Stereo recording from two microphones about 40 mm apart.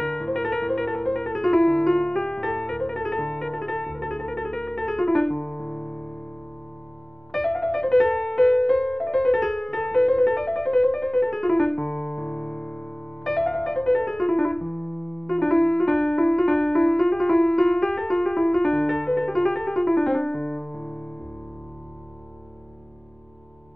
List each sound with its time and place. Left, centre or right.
0.0 s music: centre
7.3 s music: centre
13.2 s piano: centre